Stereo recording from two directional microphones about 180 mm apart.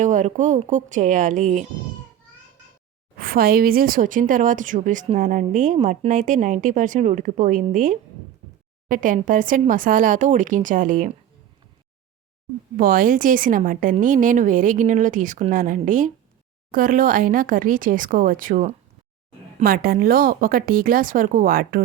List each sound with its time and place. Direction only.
0.0 s a woman's voice: 45° right (ahead or behind)
3.2 s a woman's voice: 55° right (ahead or behind)
12.7 s a woman's voice: 55° right (ahead or behind)
19.6 s a woman's voice: 55° right (ahead or behind)